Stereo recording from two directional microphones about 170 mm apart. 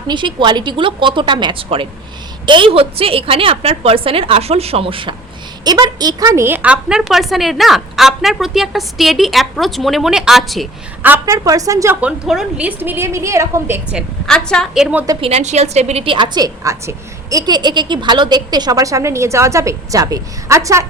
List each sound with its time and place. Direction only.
0.1 s a woman's voice: 25° right (ahead or behind); by 10.7 s centre (ahead or behind)
11.0 s a woman's voice: 15° right (ahead or behind)
14.3 s a woman's voice: 5° left (ahead or behind)
15.2 s a woman's voice: 40° right (ahead or behind); by 20.8 s 20° right (ahead or behind)